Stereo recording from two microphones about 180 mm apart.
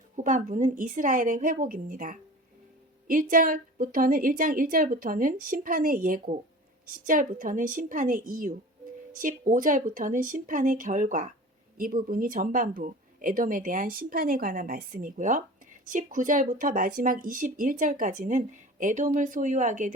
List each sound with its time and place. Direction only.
0.2 s speech: 45° right (ahead or behind)